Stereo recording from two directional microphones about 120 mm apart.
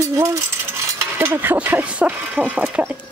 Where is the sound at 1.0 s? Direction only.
15° right (ahead or behind).